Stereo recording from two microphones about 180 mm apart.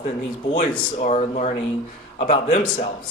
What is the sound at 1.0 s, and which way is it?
Speech, 40° left (ahead or behind).